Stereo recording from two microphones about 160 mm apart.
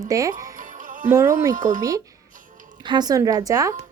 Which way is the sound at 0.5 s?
55° right (ahead or behind).